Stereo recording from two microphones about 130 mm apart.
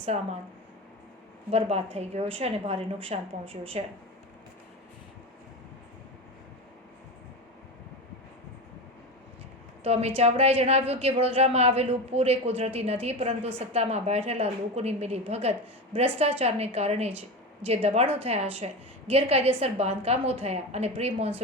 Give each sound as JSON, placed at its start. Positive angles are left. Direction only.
{"t": 0.1, "sound": "speech", "side_deg": -60}
{"t": 1.5, "sound": "speech", "side_deg": -50}
{"t": 9.8, "sound": "a woman's voice", "side_deg": -55}